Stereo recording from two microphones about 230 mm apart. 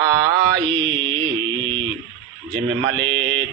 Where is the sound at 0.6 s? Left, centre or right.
Centre.